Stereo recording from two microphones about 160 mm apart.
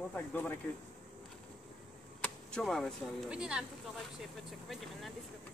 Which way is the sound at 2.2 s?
5° left (ahead or behind).